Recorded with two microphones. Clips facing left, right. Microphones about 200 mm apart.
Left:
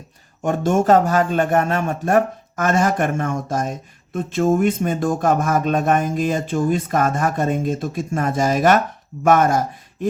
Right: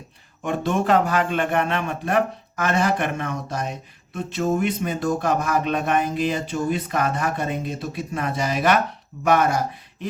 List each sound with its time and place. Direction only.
0.4 s speech: 45° left (ahead or behind)